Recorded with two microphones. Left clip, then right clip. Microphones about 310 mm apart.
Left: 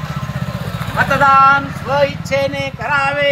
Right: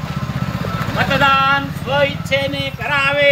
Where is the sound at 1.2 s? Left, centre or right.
Centre.